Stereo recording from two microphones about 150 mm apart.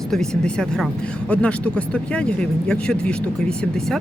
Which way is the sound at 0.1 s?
5° left (ahead or behind).